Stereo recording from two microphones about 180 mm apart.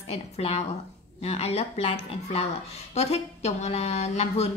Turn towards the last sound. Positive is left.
turn(degrees=35)  # may be behind; listen again after turning